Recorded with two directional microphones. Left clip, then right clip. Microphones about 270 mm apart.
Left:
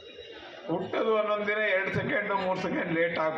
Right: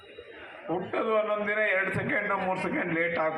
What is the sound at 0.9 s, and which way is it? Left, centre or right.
A man's voice, left.